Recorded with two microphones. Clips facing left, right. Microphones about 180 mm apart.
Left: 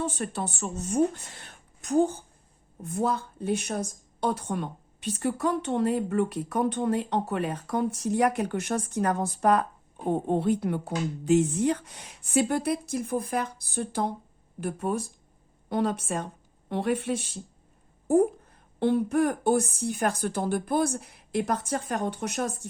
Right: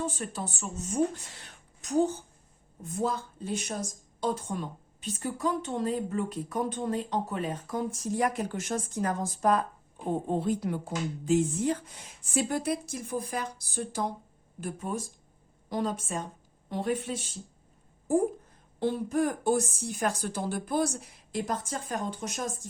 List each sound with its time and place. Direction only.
0.0 s speech: 65° left (ahead or behind)
18.8 s speech: 60° left (ahead or behind)